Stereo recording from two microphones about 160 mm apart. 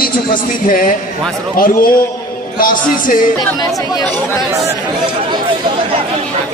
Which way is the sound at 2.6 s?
60° left (ahead or behind).